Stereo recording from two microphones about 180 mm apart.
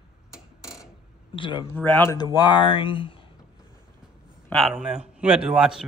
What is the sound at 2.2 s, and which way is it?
Speech, 25° left (ahead or behind).